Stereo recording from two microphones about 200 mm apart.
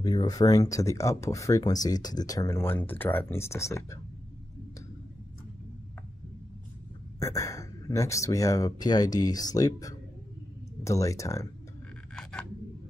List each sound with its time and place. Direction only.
0.0 s speech: 20° left (ahead or behind)
7.2 s speech: 15° left (ahead or behind)
12.2 s a sound: 5° left (ahead or behind)